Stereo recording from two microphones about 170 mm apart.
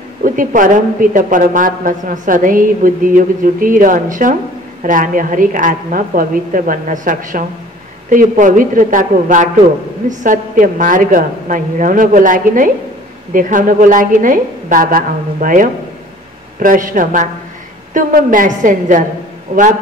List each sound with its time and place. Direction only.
0.2 s a woman's voice: 50° right (ahead or behind)